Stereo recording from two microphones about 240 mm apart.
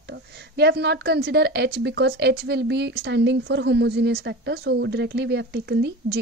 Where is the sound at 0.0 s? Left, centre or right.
Right.